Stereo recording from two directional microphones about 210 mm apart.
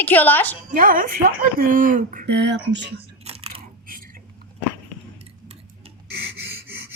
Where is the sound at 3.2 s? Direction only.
30° right (ahead or behind).